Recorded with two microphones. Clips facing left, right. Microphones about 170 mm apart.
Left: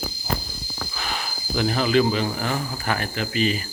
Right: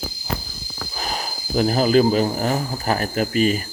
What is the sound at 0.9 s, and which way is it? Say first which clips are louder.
Speech: right 4 dB; 40° right (ahead or behind).